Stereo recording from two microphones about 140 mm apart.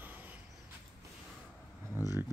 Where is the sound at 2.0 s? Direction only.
15° right (ahead or behind).